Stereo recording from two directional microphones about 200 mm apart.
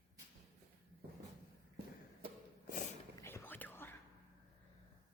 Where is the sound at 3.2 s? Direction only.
10° left (ahead or behind).